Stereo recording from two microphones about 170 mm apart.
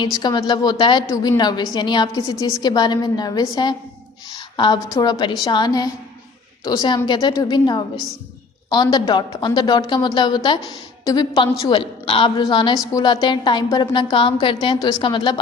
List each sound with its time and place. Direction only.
0.0 s a woman's voice: 25° left (ahead or behind)